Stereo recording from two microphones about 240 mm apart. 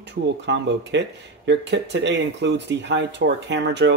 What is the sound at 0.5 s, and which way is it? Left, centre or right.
Speech, right.